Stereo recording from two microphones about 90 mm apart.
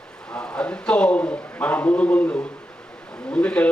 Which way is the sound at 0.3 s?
15° left (ahead or behind).